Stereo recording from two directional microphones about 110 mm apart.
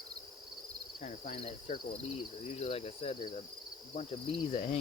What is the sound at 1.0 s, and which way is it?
Cricket, 80° left.